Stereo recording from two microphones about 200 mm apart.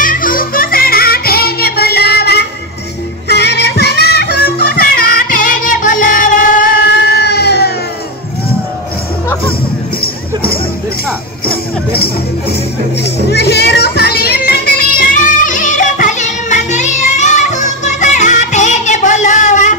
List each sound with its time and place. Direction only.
0.0 s music: 45° left (ahead or behind)
11.4 s music: 50° left (ahead or behind)